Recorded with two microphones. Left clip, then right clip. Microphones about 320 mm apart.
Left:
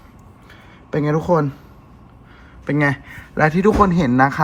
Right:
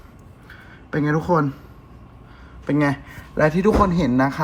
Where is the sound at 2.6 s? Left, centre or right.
Left.